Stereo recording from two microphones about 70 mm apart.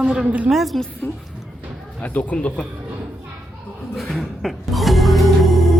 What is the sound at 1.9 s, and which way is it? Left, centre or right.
Speech, left.